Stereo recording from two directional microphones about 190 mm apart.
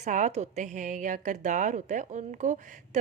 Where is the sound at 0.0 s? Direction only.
40° right (ahead or behind).